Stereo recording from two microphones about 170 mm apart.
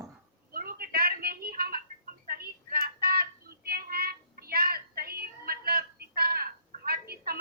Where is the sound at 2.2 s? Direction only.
60° right (ahead or behind).